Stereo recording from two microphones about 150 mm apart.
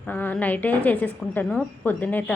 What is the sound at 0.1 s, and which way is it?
A woman's voice, 10° left (ahead or behind).